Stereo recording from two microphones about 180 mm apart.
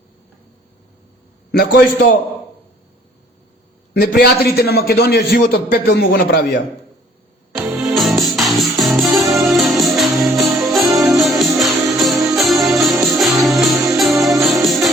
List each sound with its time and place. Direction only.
1.5 s a man's voice: 55° left (ahead or behind)
4.0 s a man's voice: 60° left (ahead or behind)
7.5 s music: 5° right (ahead or behind)